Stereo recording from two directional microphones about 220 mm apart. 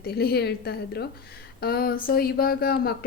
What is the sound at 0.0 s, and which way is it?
A woman's voice, 45° left (ahead or behind).